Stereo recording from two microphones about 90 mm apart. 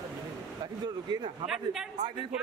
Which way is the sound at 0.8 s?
50° right (ahead or behind).